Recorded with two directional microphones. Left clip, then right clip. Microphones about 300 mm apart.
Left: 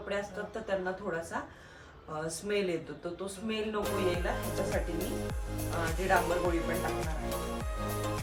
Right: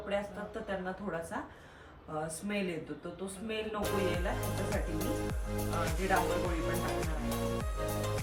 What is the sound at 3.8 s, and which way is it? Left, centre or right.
Speech, centre.